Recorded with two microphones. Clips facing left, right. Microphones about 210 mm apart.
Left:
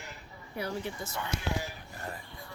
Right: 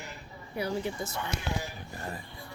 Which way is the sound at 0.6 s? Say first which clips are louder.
Right 4 dB; 15° right (ahead or behind).